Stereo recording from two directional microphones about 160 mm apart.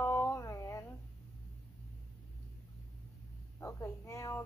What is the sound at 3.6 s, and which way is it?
Speech, 15° left (ahead or behind).